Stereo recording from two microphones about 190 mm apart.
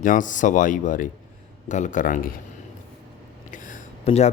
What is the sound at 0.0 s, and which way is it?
Speech, 45° left (ahead or behind).